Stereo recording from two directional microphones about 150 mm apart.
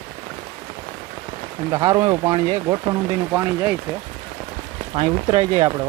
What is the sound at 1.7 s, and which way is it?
Speech, 25° right (ahead or behind).